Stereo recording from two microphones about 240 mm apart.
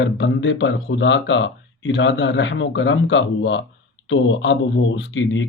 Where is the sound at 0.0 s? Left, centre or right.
Left.